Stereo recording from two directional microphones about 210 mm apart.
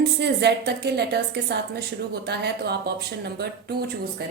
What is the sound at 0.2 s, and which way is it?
A woman's voice, 55° right (ahead or behind).